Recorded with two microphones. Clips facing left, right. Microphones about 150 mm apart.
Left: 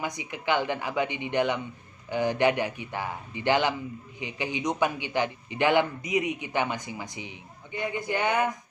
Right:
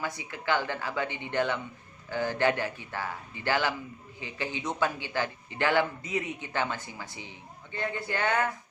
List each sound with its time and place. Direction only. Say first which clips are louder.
0.0 s a man's voice: left 2 dB; 20° left (ahead or behind)